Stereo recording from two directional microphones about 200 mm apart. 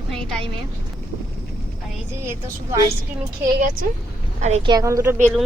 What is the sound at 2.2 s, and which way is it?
Speech, 15° right (ahead or behind).